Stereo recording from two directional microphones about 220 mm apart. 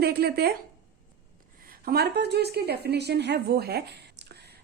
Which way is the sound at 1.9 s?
45° right (ahead or behind).